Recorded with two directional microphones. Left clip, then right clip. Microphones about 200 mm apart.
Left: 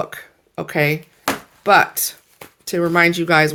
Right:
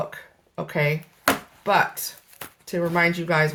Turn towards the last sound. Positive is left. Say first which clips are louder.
# left 7 dB
turn(degrees=50)  # may be behind; listen again after turning